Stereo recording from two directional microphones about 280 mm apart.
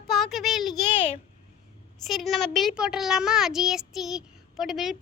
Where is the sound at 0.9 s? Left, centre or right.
Centre.